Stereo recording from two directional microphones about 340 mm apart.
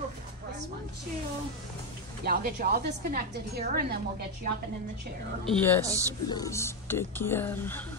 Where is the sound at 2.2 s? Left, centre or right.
Right.